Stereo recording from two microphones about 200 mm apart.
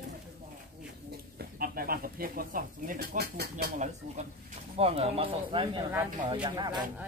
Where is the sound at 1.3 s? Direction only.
50° right (ahead or behind).